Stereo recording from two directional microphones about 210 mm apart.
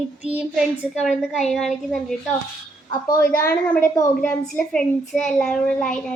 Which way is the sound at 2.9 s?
15° left (ahead or behind).